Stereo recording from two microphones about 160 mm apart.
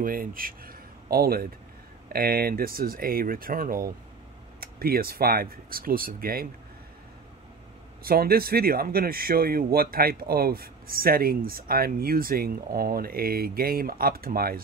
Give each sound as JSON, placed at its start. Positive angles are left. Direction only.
{"t": 0.0, "sound": "speech", "side_deg": -60}
{"t": 8.0, "sound": "speech", "side_deg": -70}